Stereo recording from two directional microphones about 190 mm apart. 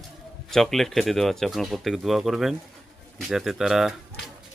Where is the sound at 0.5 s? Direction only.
Centre (ahead or behind).